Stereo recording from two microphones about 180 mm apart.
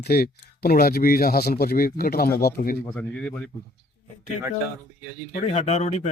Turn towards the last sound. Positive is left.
turn(degrees=40)  # may be behind; listen again after turning